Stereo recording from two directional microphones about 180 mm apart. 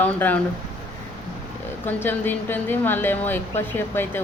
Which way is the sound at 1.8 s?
10° left (ahead or behind).